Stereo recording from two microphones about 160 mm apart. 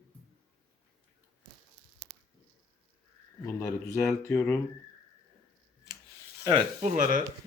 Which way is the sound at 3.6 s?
15° left (ahead or behind).